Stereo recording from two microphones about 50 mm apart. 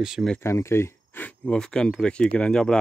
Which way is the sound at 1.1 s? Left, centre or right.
Left.